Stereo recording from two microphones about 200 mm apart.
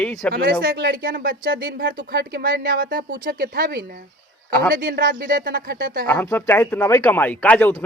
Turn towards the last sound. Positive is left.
turn(degrees=5)  # may be behind; listen again after turning